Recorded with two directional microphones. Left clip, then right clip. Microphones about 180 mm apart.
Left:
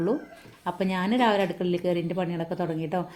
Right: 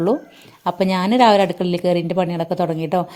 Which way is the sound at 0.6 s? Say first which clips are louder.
Right 9 dB; 50° right (ahead or behind).